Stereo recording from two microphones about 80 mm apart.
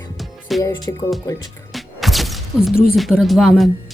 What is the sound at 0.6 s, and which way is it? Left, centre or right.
Music, left.